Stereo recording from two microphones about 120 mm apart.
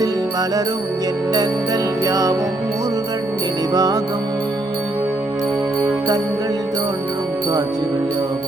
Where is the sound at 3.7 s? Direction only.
30° right (ahead or behind).